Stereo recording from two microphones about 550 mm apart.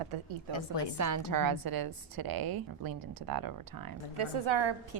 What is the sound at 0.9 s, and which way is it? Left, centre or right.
A woman's voice, right.